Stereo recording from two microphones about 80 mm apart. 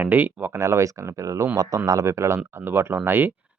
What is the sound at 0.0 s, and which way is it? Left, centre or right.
Speech, right.